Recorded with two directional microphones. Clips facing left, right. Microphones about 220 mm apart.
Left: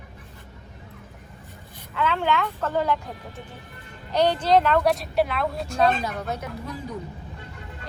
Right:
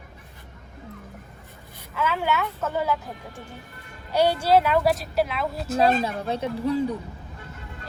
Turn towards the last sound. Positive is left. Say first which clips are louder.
# right 10 dB
turn(degrees=-30)  # may be behind; listen again after turning